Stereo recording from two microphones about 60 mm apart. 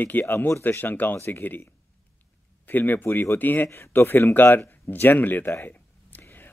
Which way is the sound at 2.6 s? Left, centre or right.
Left.